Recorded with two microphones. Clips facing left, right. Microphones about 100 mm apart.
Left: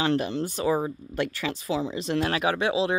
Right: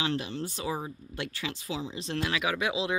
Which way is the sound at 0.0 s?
50° left (ahead or behind).